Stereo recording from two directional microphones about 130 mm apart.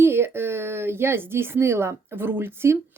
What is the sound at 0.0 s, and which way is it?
Speech, 20° right (ahead or behind).